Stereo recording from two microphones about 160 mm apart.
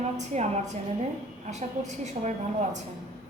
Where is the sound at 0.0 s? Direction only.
45° right (ahead or behind).